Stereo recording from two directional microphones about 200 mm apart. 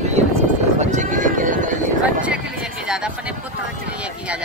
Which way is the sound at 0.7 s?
40° right (ahead or behind).